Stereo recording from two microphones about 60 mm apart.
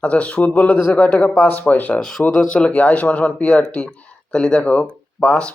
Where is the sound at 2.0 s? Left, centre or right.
Centre.